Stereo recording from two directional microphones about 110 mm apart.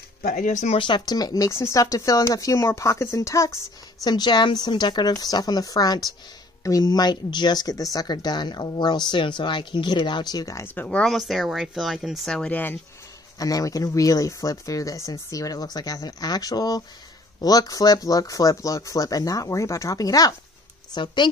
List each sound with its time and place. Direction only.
0.7 s speech: 45° left (ahead or behind); by 3.5 s 30° left (ahead or behind)
4.0 s speech: 40° left (ahead or behind)
10.7 s speech: 15° left (ahead or behind)
11.1 s speech: centre (ahead or behind)
13.4 s speech: 30° left (ahead or behind)